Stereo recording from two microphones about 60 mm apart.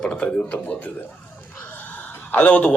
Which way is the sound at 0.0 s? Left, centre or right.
Centre.